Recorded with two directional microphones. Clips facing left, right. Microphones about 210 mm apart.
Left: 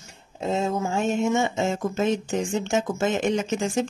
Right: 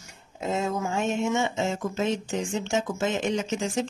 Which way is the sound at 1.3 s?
45° left (ahead or behind).